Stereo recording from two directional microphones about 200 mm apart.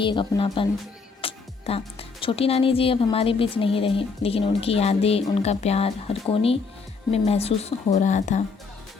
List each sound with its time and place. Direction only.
0.0 s a woman's voice: 25° left (ahead or behind)